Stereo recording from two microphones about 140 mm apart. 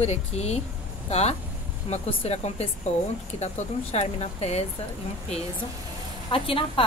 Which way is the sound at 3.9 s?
50° left (ahead or behind).